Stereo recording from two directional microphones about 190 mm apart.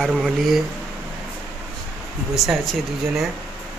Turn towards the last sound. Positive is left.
turn(degrees=0)  # may be behind; listen again after turning